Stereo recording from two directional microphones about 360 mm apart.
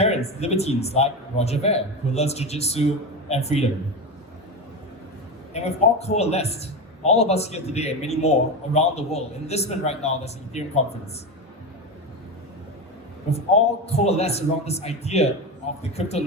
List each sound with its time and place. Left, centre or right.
0.0 s a man's voice: centre
5.5 s a man's voice: centre
13.8 s a man's voice: centre